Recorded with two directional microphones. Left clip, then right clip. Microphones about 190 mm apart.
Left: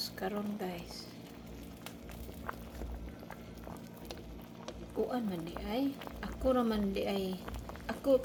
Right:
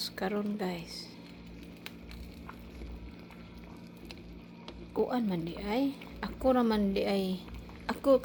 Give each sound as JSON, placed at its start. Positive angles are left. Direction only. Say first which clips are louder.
{"t": 0.0, "sound": "a woman's voice", "louder": "right 4 dB", "side_deg": -40}
{"t": 5.1, "sound": "a woman's voice", "louder": "right 4 dB", "side_deg": -40}
{"t": 7.9, "sound": "a sound", "louder": "right 4 dB", "side_deg": -40}